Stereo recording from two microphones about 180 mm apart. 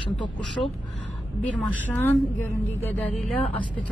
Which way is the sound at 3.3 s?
30° left (ahead or behind).